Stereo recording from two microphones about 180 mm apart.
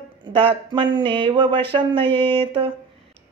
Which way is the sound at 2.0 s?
10° left (ahead or behind).